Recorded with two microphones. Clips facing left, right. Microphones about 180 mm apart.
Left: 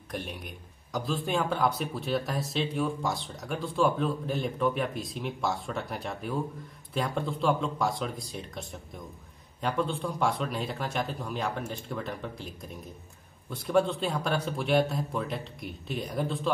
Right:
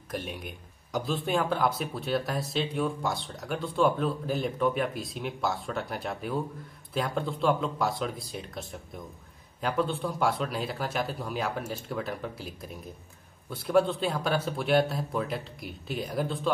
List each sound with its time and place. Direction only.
0.1 s speech: centre (ahead or behind)